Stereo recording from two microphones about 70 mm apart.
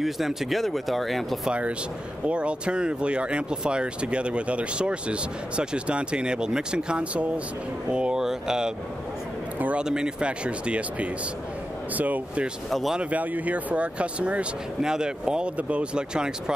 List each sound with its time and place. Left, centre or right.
0.0 s speech: centre
2.2 s speech: centre
9.6 s a man's voice: right
9.8 s speech: centre
12.7 s speech: centre
13.1 s speech: right